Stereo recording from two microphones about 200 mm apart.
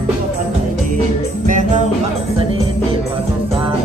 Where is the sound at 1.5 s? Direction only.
40° right (ahead or behind).